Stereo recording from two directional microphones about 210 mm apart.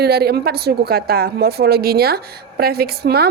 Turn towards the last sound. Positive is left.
turn(degrees=-50)  # may be behind; listen again after turning